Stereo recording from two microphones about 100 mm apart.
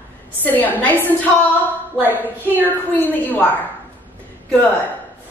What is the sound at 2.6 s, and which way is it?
Speech, 20° left (ahead or behind).